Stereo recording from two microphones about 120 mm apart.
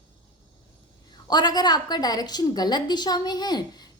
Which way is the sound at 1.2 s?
35° left (ahead or behind).